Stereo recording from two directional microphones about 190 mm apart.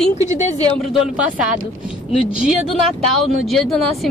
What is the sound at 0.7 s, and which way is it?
Speech, centre (ahead or behind).